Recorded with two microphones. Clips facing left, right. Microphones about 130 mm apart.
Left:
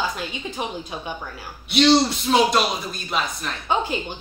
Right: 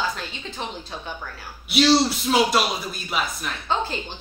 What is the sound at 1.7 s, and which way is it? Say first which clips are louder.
A man's voice: left 1 dB; 5° right (ahead or behind).